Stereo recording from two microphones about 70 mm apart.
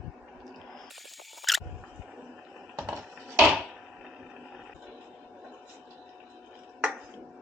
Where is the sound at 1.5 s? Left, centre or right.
Centre.